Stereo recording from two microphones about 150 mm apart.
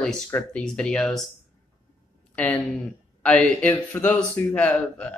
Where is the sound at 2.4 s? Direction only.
5° left (ahead or behind).